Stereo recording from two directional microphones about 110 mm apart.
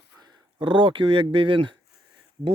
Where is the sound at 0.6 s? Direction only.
50° right (ahead or behind).